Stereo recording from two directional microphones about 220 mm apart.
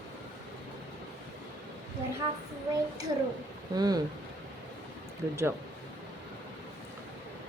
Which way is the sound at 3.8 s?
15° right (ahead or behind).